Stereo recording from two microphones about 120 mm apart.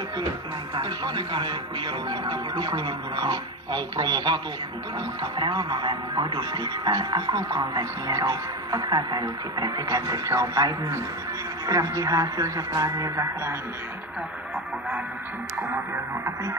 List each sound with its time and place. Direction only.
0.7 s speech: 35° right (ahead or behind); by 13.6 s 20° right (ahead or behind)